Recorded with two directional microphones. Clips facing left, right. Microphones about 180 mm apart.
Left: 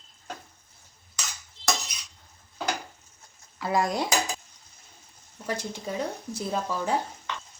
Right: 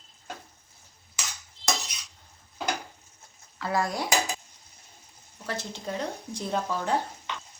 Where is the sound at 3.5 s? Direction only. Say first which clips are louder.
Left 2 dB; 15° left (ahead or behind).